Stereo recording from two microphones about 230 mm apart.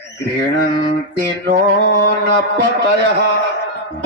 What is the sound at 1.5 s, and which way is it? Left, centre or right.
A man's voice, right.